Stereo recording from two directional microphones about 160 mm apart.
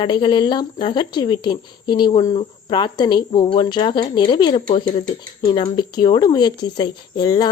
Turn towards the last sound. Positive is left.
turn(degrees=25)  # may be behind; listen again after turning